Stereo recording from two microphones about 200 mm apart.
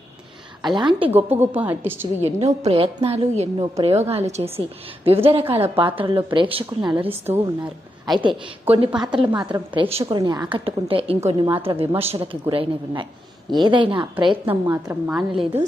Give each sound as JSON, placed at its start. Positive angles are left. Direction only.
{"t": 0.6, "sound": "speech", "side_deg": -25}
{"t": 1.1, "sound": "a woman's voice", "side_deg": -10}
{"t": 2.2, "sound": "speech", "side_deg": -35}
{"t": 7.3, "sound": "a woman's voice", "side_deg": -10}
{"t": 8.2, "sound": "speech", "side_deg": -25}
{"t": 8.9, "sound": "a woman's voice", "side_deg": -5}
{"t": 9.3, "sound": "speech", "side_deg": -25}
{"t": 14.4, "sound": "a woman's voice", "side_deg": -10}